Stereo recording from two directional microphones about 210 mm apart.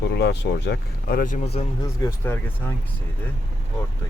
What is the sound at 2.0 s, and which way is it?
Speech, 10° left (ahead or behind).